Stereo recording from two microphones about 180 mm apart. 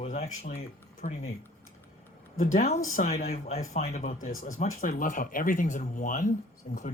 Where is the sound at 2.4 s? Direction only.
45° left (ahead or behind).